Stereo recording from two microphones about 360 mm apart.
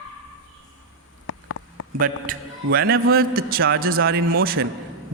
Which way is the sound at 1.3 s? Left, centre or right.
Left.